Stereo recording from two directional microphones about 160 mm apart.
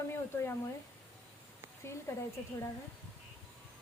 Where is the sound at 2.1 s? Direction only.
20° left (ahead or behind).